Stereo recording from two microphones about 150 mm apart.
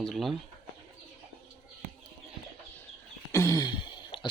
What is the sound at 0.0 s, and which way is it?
Speech, centre (ahead or behind).